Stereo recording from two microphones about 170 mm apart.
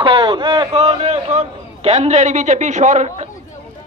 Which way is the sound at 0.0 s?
30° right (ahead or behind).